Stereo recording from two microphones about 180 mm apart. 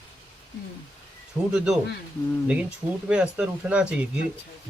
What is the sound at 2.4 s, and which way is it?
Speech, 5° right (ahead or behind).